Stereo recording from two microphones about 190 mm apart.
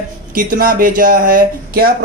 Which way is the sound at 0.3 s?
45° right (ahead or behind).